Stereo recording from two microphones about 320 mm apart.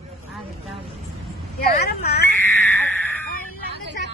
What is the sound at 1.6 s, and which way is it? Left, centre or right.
Speech, left.